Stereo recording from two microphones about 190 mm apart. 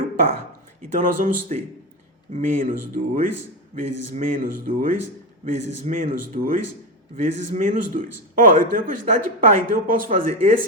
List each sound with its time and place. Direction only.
0.8 s speech: 45° right (ahead or behind)